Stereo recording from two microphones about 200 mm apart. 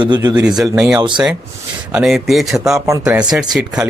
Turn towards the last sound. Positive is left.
turn(degrees=-5)  # may be behind; listen again after turning